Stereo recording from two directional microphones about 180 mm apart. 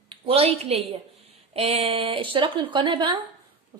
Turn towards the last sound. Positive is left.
turn(degrees=-25)  # may be behind; listen again after turning